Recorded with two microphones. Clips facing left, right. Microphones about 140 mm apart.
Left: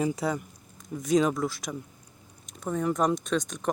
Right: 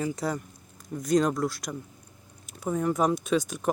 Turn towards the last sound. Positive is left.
turn(degrees=-5)  # may be behind; listen again after turning